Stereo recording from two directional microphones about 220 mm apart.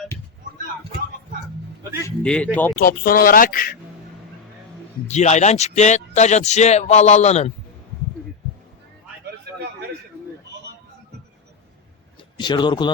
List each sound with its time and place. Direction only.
2.0 s speech: 5° left (ahead or behind)
2.7 s a man's voice: 40° left (ahead or behind)
5.0 s a man's voice: 30° left (ahead or behind)
12.4 s speech: 20° left (ahead or behind)